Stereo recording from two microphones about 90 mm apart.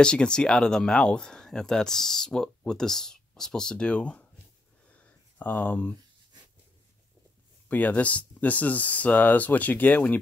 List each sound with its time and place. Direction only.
0.0 s speech: 10° left (ahead or behind)
4.8 s a sound: 15° left (ahead or behind)
7.6 s speech: 15° left (ahead or behind)